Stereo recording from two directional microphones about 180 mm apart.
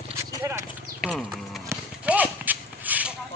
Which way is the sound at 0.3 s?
15° right (ahead or behind).